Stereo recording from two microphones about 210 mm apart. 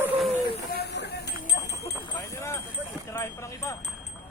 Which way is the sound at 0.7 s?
50° left (ahead or behind).